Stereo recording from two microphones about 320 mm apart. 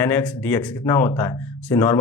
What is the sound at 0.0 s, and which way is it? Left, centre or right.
Speech, centre.